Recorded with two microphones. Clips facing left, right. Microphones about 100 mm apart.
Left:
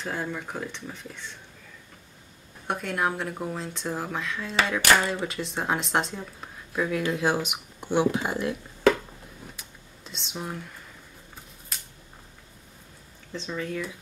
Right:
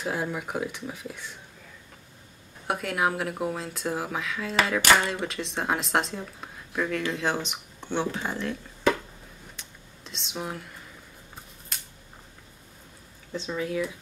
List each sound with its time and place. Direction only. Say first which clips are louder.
0.0 s speech: right 2 dB; 10° right (ahead or behind)
2.6 s speech: right 1 dB; 5° right (ahead or behind)
9.6 s computer keyboard: even; centre (ahead or behind)
13.3 s speech: right 2 dB; 5° right (ahead or behind)